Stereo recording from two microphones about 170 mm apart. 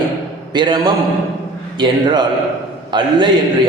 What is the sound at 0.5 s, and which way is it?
A man's voice, 25° right (ahead or behind).